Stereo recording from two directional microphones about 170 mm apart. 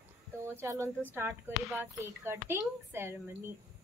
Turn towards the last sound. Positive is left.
turn(degrees=-15)  # may be behind; listen again after turning